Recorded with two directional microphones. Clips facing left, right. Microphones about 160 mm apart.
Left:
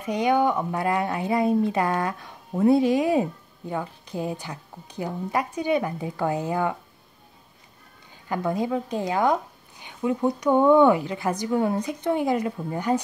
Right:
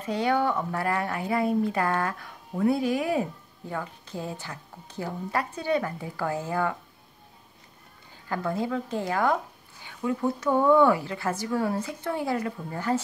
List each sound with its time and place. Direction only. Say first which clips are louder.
0.0 s speech: left 3 dB; 15° left (ahead or behind)
8.3 s speech: left 3 dB; 15° left (ahead or behind)